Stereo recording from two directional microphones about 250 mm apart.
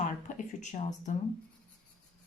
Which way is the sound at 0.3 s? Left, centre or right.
Left.